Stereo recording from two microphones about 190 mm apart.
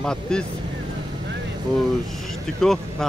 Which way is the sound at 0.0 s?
5° left (ahead or behind).